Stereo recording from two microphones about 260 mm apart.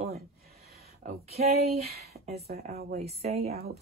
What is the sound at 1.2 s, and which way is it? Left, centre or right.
Speech, right.